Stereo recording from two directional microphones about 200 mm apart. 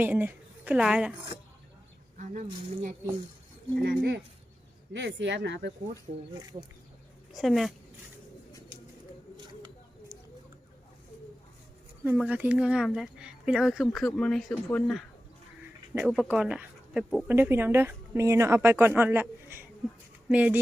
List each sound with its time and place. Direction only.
0.0 s speech: 10° right (ahead or behind)
2.1 s speech: 40° right (ahead or behind)
3.8 s speech: 55° right (ahead or behind)
5.9 s a woman's voice: 15° right (ahead or behind)
7.3 s speech: centre (ahead or behind)
12.0 s a woman's voice: 5° right (ahead or behind)